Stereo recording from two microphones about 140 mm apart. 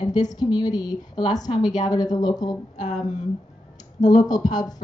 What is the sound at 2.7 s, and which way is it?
Speech, 60° left (ahead or behind).